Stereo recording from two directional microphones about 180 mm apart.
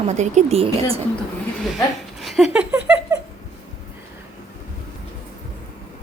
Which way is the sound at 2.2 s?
5° right (ahead or behind).